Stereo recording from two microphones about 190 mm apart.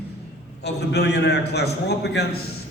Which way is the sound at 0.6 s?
60° left (ahead or behind).